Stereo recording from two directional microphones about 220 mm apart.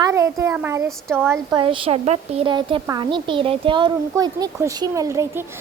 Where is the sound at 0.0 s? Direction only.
15° right (ahead or behind).